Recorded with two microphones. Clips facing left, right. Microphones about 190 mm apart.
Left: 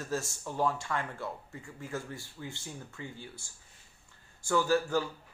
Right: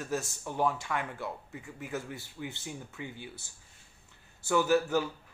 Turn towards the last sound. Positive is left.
turn(degrees=-20)  # may be behind; listen again after turning